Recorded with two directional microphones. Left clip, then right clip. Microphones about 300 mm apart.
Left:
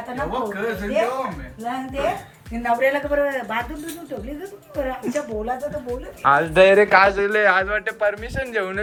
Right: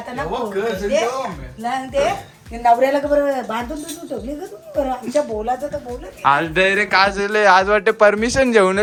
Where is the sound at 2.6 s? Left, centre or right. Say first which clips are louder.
Right 5 dB; right.